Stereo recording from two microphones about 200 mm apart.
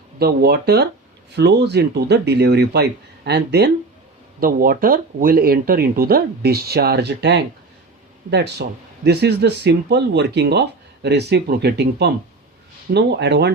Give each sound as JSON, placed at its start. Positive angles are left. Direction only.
{"t": 0.2, "sound": "speech", "side_deg": -50}